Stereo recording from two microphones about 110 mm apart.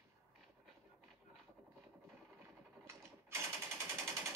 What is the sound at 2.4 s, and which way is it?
Machine gun, 25° right (ahead or behind).